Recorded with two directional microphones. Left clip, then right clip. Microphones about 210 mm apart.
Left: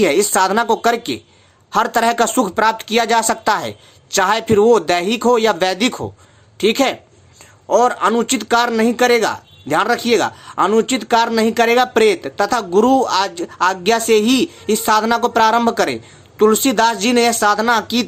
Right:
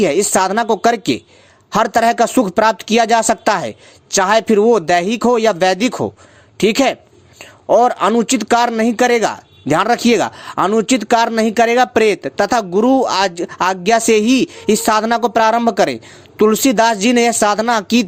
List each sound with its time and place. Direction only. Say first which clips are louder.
0.0 s speech: even; 30° right (ahead or behind)